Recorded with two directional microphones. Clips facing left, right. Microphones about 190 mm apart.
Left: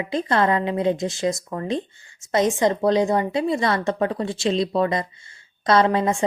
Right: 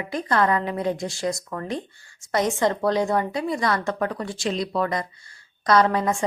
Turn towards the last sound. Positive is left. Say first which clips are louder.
# left 1 dB
turn(degrees=25)  # may be behind; listen again after turning